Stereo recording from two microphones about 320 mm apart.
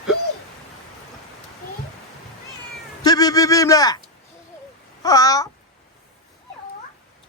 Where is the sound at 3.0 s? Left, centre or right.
Centre.